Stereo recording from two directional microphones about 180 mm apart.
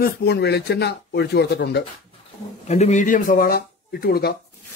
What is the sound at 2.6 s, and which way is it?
Speech, 40° left (ahead or behind).